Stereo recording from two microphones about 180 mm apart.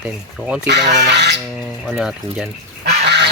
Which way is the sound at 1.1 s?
70° right (ahead or behind).